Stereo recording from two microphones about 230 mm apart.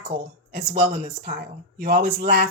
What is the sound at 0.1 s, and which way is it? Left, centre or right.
Speech, right.